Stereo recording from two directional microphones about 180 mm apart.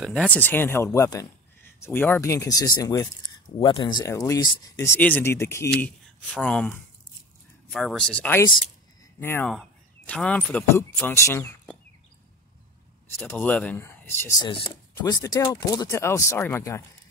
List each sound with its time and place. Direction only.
0.0 s speech: 5° left (ahead or behind)
13.2 s speech: 5° left (ahead or behind)
14.4 s speech: 25° left (ahead or behind)